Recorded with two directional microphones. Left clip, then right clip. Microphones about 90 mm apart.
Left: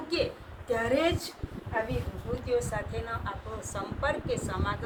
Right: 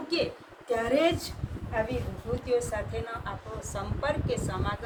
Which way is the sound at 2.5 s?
15° right (ahead or behind).